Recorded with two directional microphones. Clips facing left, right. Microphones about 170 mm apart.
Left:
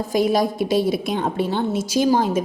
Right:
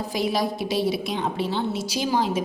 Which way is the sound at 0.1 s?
50° left (ahead or behind).